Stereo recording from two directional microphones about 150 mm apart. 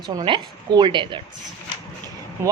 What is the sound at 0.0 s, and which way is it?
A woman's voice, 30° right (ahead or behind).